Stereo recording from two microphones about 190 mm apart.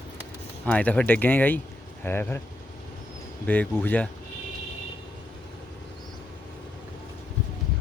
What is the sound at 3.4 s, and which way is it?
Speech, 10° left (ahead or behind).